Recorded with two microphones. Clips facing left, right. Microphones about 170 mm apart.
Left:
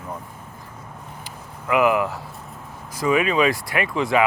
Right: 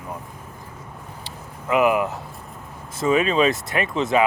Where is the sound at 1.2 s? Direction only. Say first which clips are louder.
Right 1 dB; 20° right (ahead or behind).